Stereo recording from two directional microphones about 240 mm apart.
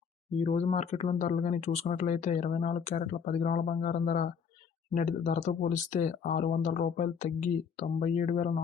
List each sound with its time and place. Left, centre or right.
0.3 s speech: left